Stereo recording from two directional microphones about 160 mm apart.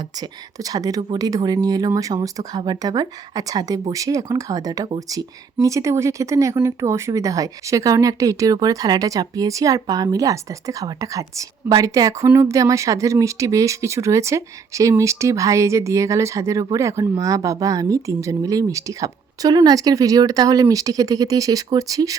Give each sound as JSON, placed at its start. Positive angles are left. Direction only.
{"t": 0.2, "sound": "speech", "side_deg": -20}